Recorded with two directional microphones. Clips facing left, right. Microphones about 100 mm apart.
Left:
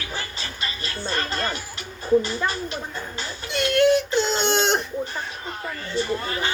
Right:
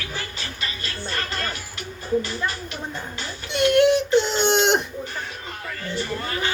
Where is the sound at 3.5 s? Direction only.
20° right (ahead or behind).